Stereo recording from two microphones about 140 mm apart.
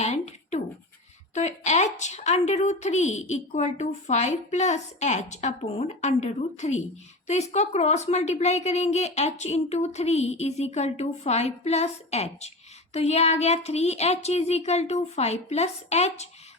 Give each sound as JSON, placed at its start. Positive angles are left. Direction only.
{"t": 0.0, "sound": "scratch", "side_deg": 55}
{"t": 1.3, "sound": "a woman's voice", "side_deg": 55}